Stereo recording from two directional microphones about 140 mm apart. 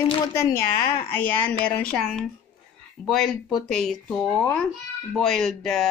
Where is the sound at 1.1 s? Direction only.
15° left (ahead or behind).